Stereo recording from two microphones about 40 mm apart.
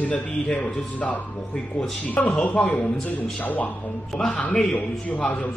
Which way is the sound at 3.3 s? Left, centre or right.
Left.